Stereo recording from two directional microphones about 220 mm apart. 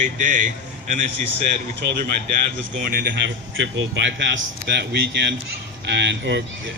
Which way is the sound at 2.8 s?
40° right (ahead or behind).